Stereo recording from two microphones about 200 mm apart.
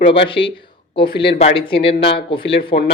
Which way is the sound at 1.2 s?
25° left (ahead or behind).